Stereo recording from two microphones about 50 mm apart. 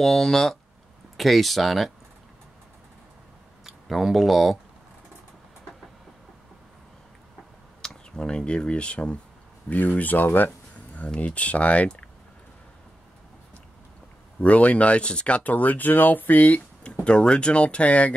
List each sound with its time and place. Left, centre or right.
0.0 s speech: centre
3.6 s speech: centre
7.8 s speech: centre
9.7 s speech: left
14.4 s speech: left
17.0 s speech: centre